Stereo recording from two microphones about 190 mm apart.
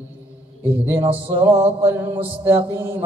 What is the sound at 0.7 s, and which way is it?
Mantra, 10° right (ahead or behind).